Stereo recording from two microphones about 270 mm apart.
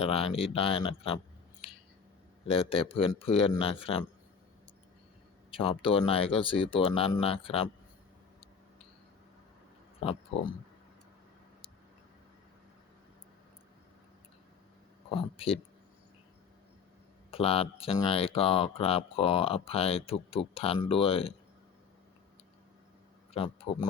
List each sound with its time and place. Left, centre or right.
0.0 s speech: left
2.5 s speech: centre
5.5 s speech: centre
10.0 s speech: left
15.1 s speech: left
17.3 s speech: left
23.3 s speech: left